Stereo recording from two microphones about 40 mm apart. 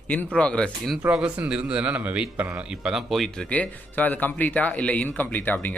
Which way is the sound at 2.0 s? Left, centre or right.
Right.